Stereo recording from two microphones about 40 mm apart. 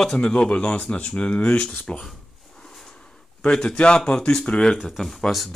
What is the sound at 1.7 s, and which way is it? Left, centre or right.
Speech, centre.